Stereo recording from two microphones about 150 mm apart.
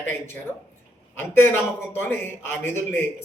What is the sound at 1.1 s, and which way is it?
A man's voice, 15° left (ahead or behind).